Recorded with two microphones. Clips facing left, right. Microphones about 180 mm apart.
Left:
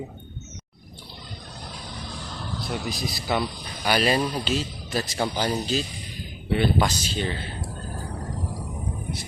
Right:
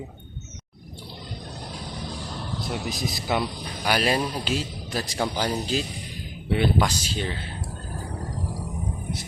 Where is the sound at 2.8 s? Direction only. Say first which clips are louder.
Right 1 dB; 20° right (ahead or behind).